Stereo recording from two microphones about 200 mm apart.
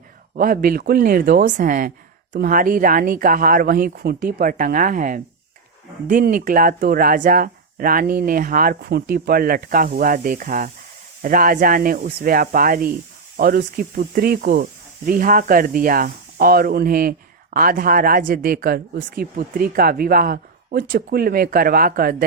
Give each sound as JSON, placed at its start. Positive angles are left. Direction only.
{"t": 0.3, "sound": "speech", "side_deg": -45}